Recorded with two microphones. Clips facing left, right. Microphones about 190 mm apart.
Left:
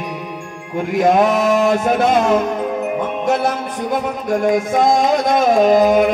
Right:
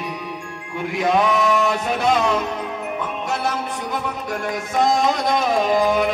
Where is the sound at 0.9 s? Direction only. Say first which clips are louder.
Left 5 dB; 45° left (ahead or behind).